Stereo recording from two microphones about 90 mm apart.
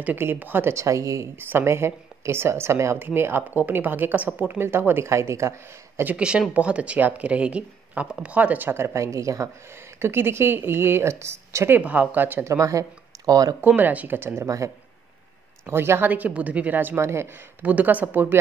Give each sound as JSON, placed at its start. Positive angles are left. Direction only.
{"t": 0.0, "sound": "speech", "side_deg": -20}
{"t": 1.4, "sound": "speech", "side_deg": -25}
{"t": 6.1, "sound": "speech", "side_deg": -10}
{"t": 11.8, "sound": "speech", "side_deg": -15}
{"t": 12.5, "sound": "speech", "side_deg": -40}
{"t": 13.6, "sound": "speech", "side_deg": -20}
{"t": 15.6, "sound": "speech", "side_deg": -25}
{"t": 17.6, "sound": "speech", "side_deg": -15}